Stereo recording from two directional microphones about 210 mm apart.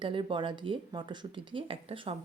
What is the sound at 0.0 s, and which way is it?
Speech, 25° right (ahead or behind).